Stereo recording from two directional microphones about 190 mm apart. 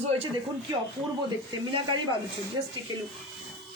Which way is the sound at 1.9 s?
25° right (ahead or behind).